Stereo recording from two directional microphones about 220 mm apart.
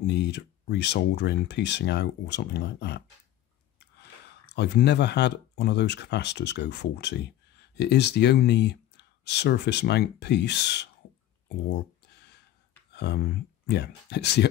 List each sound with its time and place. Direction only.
0.0 s speech: 50° left (ahead or behind)
4.3 s speech: 50° left (ahead or behind)
11.4 s a sound: 50° left (ahead or behind)
12.9 s speech: 50° left (ahead or behind)